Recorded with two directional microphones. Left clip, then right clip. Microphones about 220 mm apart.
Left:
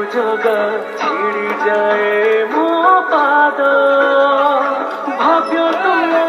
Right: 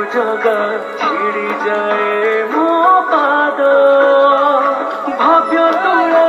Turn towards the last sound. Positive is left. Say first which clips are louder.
# right 3 dB
turn(degrees=50)  # may be behind; listen again after turning